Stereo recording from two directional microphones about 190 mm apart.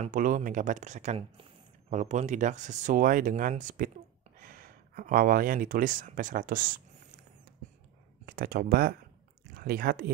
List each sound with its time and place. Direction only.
0.0 s speech: 45° right (ahead or behind)
8.3 s speech: 55° right (ahead or behind)